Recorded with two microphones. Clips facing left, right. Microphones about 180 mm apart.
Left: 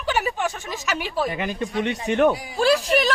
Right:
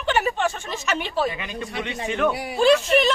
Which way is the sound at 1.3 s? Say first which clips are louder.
Left 3 dB; 45° left (ahead or behind).